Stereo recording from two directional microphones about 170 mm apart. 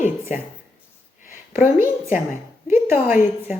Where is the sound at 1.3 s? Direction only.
15° right (ahead or behind).